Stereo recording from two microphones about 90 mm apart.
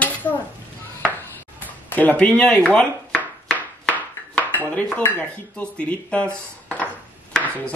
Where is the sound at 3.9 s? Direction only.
20° left (ahead or behind).